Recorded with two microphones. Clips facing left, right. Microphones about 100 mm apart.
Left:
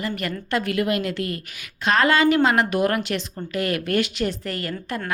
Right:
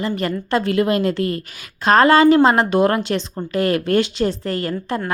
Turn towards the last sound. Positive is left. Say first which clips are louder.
# right 6 dB
turn(degrees=-30)  # may be behind; listen again after turning